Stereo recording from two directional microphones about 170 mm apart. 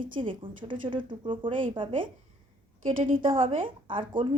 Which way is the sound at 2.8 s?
55° right (ahead or behind).